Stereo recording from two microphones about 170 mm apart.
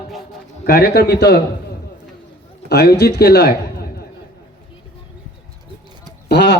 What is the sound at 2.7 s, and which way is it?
A man's voice, 70° left (ahead or behind).